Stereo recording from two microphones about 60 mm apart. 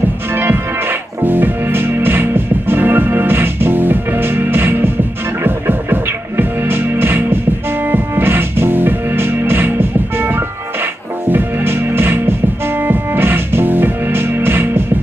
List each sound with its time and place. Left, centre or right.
0.3 s music: right